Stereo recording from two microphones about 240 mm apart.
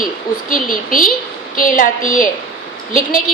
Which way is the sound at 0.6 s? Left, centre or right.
Left.